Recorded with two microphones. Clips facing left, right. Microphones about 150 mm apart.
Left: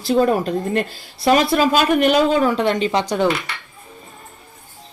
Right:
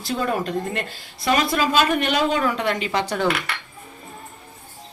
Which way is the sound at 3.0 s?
15° left (ahead or behind).